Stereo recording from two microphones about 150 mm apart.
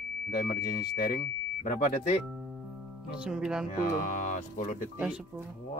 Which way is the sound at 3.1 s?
5° right (ahead or behind).